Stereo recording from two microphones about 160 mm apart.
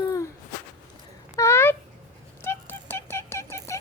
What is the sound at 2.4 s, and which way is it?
Music, 15° left (ahead or behind).